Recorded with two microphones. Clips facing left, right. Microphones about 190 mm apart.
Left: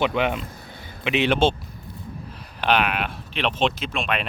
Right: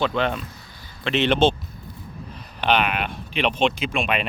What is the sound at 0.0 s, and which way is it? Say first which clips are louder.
Speech: left 1 dB; 15° left (ahead or behind).